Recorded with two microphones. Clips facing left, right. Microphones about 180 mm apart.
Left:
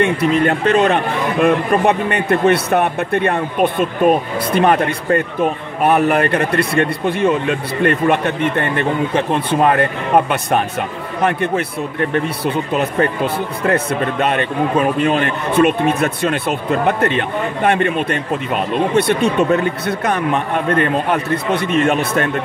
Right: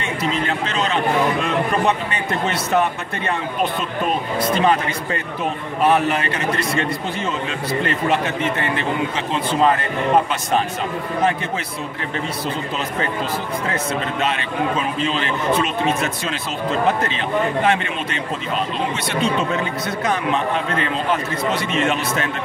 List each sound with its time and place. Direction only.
0.0 s a man's voice: 60° left (ahead or behind)
14.2 s a man's voice: 55° left (ahead or behind)